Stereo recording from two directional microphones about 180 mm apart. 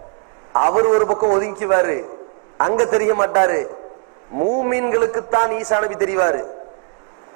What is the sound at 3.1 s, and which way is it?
Speech, 25° right (ahead or behind).